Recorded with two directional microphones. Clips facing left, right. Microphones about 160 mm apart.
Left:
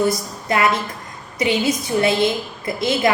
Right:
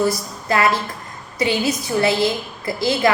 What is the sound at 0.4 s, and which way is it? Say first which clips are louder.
A woman's voice: even; 20° left (ahead or behind).